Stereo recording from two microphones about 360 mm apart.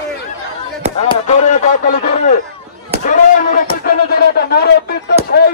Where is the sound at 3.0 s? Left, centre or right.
Left.